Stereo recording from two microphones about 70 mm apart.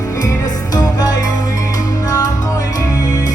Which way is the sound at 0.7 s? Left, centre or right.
Left.